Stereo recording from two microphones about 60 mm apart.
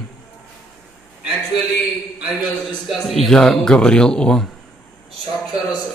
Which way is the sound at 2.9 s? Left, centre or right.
Centre.